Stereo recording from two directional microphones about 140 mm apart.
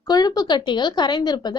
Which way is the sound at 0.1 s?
30° left (ahead or behind).